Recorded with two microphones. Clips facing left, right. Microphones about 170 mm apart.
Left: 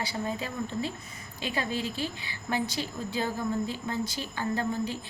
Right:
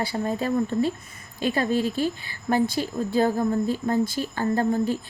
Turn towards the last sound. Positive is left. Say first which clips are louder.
# right 7 dB
turn(degrees=-45)  # may be behind; listen again after turning